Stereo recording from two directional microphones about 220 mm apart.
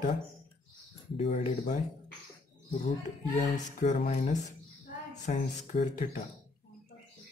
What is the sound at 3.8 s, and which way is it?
Speech, 35° left (ahead or behind).